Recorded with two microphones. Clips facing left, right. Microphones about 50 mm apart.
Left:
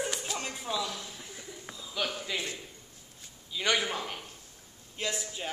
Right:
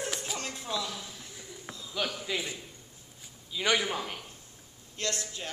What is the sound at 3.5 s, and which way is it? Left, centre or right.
Speech, centre.